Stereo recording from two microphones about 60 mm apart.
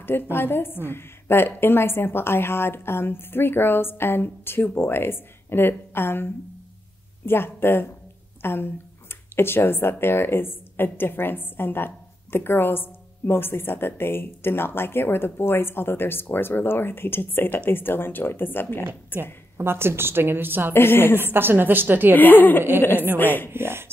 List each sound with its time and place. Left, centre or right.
0.0 s a woman's voice: left
19.5 s a woman's voice: right
20.7 s speech: left
21.2 s a woman's voice: right
22.1 s speech: left
23.5 s a woman's voice: right